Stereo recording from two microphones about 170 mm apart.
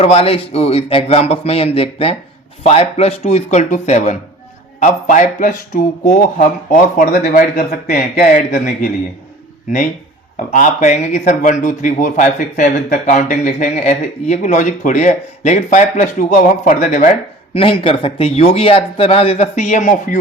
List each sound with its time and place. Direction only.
0.0 s a man's voice: 35° left (ahead or behind)
10.5 s a man's voice: 50° left (ahead or behind)
17.5 s speech: 35° left (ahead or behind)